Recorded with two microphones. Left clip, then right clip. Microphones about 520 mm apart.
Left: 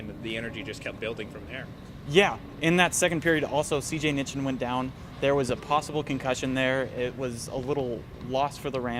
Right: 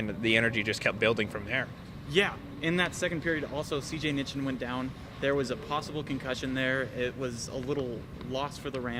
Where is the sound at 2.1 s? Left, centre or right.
Left.